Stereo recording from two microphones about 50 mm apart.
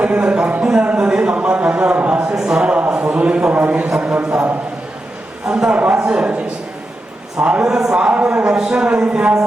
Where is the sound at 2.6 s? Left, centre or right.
Right.